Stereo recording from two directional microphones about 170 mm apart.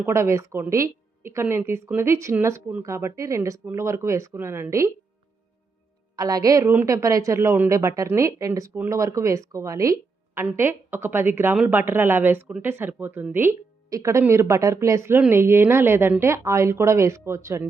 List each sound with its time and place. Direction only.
0.0 s a woman's voice: 15° right (ahead or behind)
6.1 s a woman's voice: 20° right (ahead or behind)